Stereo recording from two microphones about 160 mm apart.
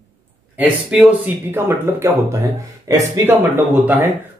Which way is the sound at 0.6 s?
5° right (ahead or behind).